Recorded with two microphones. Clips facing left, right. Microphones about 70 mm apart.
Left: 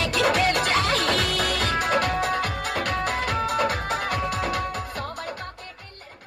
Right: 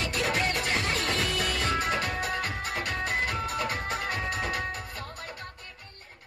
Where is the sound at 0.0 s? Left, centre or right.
Left.